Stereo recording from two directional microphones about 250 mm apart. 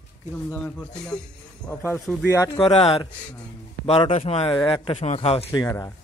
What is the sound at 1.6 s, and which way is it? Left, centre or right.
Speech, centre.